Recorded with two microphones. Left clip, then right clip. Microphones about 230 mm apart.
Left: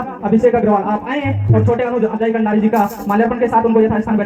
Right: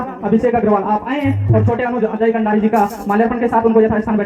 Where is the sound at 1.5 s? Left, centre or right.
Left.